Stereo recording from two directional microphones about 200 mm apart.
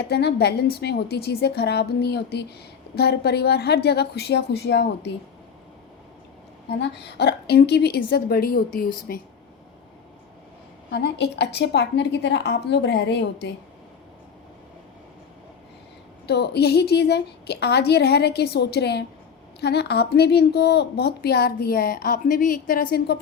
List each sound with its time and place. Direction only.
0.0 s a woman's voice: 55° left (ahead or behind)
6.7 s a woman's voice: 55° left (ahead or behind)
10.9 s a woman's voice: 55° left (ahead or behind)
16.2 s a woman's voice: 55° left (ahead or behind)